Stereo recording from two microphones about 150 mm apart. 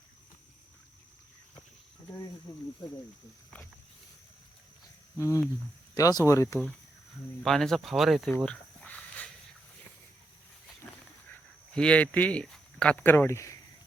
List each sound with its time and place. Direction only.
5.1 s speech: 20° left (ahead or behind)
7.4 s speech: centre (ahead or behind)
11.7 s speech: 5° left (ahead or behind)